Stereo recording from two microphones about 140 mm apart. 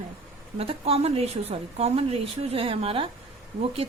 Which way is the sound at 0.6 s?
45° right (ahead or behind).